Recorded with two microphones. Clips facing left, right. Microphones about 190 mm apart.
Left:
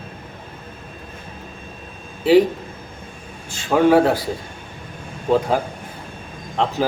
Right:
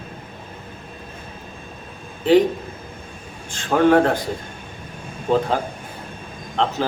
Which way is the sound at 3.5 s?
10° left (ahead or behind).